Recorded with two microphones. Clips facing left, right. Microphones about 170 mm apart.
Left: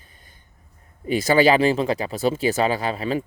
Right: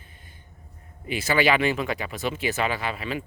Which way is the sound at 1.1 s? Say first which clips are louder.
Left 6 dB; 40° left (ahead or behind).